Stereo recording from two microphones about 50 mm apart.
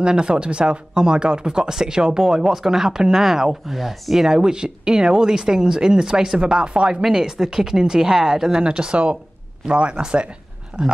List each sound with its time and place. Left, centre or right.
0.0 s speech: centre